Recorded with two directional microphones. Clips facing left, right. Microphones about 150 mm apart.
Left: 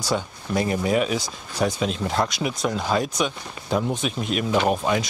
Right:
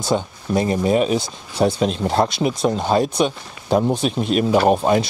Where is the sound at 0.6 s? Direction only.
25° right (ahead or behind).